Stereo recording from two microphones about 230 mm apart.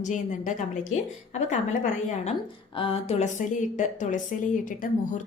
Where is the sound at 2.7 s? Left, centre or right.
Left.